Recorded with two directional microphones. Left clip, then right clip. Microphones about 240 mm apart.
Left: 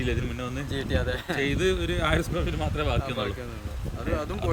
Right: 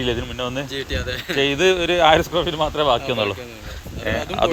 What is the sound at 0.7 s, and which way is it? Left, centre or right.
Speech, left.